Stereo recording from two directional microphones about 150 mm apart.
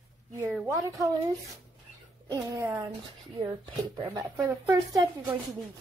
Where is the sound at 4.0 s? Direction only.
25° right (ahead or behind).